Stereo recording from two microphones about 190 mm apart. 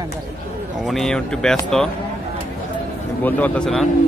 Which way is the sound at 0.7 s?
Centre (ahead or behind).